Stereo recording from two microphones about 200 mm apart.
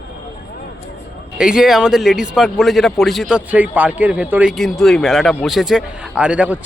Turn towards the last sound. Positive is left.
turn(degrees=-5)  # may be behind; listen again after turning